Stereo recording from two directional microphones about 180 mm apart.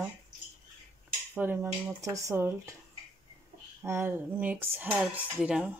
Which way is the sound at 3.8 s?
15° right (ahead or behind).